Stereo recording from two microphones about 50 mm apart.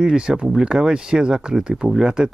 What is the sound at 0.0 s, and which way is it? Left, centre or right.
Speech, centre.